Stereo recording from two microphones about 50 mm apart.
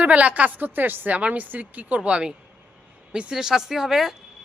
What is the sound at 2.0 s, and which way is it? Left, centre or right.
Speech, centre.